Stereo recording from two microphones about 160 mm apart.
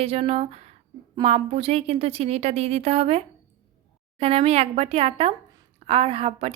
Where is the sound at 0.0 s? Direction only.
40° right (ahead or behind).